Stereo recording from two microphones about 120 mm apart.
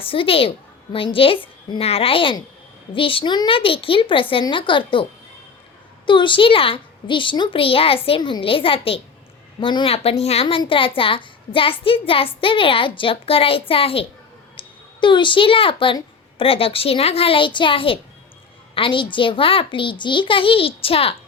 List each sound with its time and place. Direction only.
0.0 s a woman's voice: 50° left (ahead or behind)
6.1 s a woman's voice: 45° left (ahead or behind)
14.6 s a sound: 45° left (ahead or behind)
15.0 s a woman's voice: 40° left (ahead or behind)